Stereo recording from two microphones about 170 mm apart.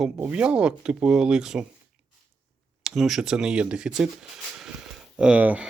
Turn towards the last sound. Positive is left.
turn(degrees=-10)  # may be behind; listen again after turning